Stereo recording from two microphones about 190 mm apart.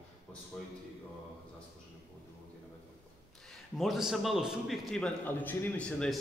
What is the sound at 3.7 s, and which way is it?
A man's voice, centre (ahead or behind).